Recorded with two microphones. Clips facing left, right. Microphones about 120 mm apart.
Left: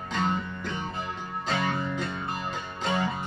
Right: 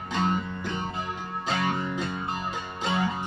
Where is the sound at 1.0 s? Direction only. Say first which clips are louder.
Right 1 dB; 15° right (ahead or behind).